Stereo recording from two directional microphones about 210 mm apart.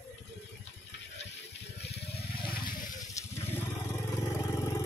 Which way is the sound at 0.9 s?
55° left (ahead or behind).